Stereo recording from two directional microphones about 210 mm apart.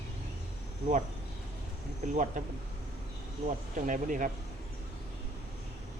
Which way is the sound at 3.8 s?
40° right (ahead or behind).